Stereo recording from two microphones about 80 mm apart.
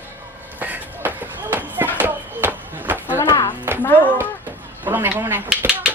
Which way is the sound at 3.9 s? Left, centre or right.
Left.